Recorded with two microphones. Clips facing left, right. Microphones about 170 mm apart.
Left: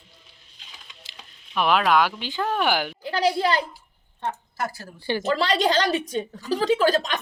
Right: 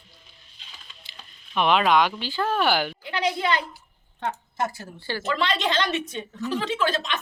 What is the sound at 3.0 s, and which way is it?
Speech, 35° left (ahead or behind).